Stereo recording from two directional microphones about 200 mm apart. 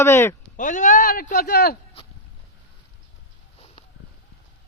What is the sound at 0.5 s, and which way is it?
A man's voice, 40° left (ahead or behind).